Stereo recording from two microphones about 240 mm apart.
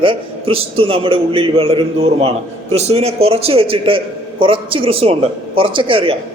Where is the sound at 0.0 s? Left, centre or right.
Right.